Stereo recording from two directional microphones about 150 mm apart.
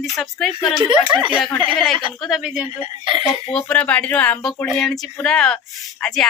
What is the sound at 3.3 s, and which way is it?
Speech, 40° left (ahead or behind).